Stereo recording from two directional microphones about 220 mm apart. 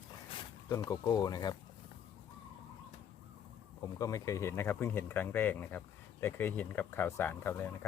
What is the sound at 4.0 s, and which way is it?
Speech, 15° left (ahead or behind).